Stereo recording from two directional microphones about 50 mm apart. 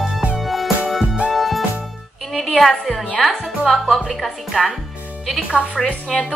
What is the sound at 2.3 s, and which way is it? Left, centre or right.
A woman's voice, centre.